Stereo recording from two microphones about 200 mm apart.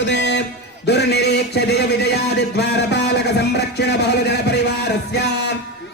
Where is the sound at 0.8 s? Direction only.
55° left (ahead or behind).